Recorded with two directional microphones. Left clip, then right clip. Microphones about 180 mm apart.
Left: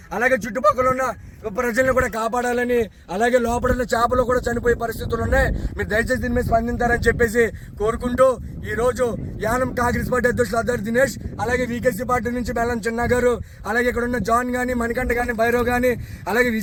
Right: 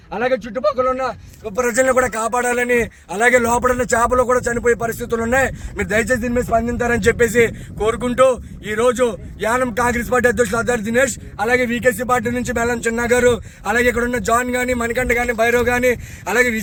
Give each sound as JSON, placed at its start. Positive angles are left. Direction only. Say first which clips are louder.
{"t": 0.1, "sound": "speech", "louder": "even", "side_deg": -20}
{"t": 11.4, "sound": "a man's voice", "louder": "right 5 dB", "side_deg": -35}
{"t": 11.9, "sound": "speech", "louder": "right 3 dB", "side_deg": -20}
{"t": 12.6, "sound": "a man's voice", "louder": "right 5 dB", "side_deg": -35}
{"t": 13.1, "sound": "speech", "louder": "right 4 dB", "side_deg": -20}
{"t": 15.4, "sound": "a man's voice", "louder": "right 2 dB", "side_deg": -5}